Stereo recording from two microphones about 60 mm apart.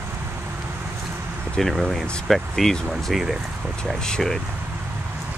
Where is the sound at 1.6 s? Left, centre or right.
Centre.